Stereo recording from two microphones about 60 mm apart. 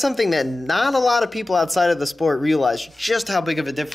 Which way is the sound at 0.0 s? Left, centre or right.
Centre.